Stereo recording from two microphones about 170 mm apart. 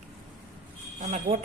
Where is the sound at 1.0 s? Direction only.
45° right (ahead or behind).